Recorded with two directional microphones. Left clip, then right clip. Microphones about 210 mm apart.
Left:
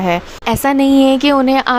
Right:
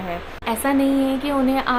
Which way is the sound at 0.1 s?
55° left (ahead or behind).